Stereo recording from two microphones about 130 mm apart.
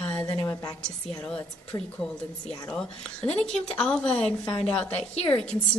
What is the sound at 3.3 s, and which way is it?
Speech, 10° left (ahead or behind).